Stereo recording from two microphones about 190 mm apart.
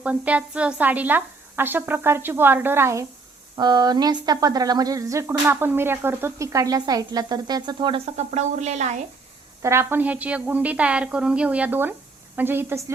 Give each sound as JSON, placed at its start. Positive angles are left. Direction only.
{"t": 0.0, "sound": "a woman's voice", "side_deg": -5}
{"t": 9.6, "sound": "a woman's voice", "side_deg": -15}